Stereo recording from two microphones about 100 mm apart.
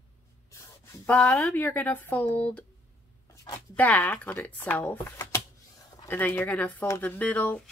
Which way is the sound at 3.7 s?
15° left (ahead or behind).